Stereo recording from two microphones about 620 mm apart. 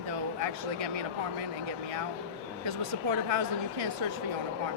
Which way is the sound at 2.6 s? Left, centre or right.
Right.